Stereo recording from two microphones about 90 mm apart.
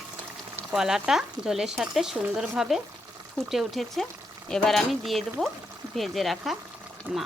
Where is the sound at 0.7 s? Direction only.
5° right (ahead or behind).